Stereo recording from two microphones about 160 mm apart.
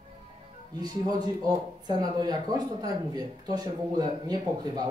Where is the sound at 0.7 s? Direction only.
25° right (ahead or behind).